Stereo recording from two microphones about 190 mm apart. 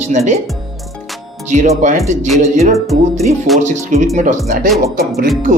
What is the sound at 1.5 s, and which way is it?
Speech, 40° right (ahead or behind).